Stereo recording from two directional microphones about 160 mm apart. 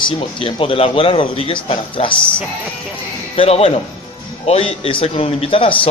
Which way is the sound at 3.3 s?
40° left (ahead or behind).